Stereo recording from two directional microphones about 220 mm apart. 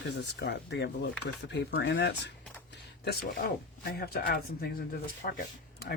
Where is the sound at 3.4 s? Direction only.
45° left (ahead or behind).